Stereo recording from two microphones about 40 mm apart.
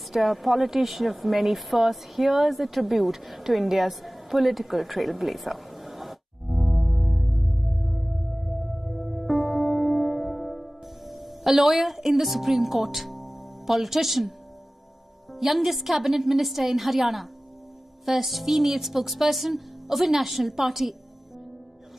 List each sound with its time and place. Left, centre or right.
0.1 s speech: centre
8.8 s music: centre
15.3 s speech: centre